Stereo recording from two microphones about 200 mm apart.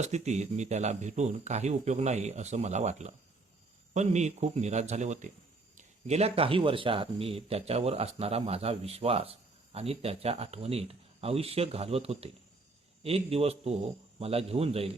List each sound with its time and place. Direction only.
0.0 s speech: 35° right (ahead or behind)